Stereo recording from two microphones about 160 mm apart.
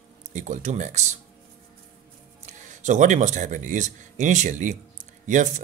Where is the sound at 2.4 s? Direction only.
50° right (ahead or behind).